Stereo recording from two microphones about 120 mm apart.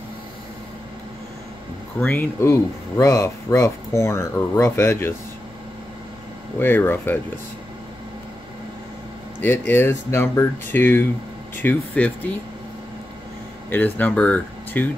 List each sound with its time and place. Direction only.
2.0 s speech: 15° left (ahead or behind)
6.6 s speech: 15° left (ahead or behind)
9.4 s speech: 15° left (ahead or behind)
13.7 s speech: 15° left (ahead or behind)